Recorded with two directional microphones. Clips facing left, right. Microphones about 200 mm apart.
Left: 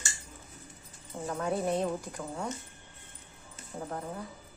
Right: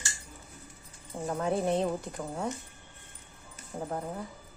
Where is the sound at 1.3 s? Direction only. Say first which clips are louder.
Right 2 dB; 25° right (ahead or behind).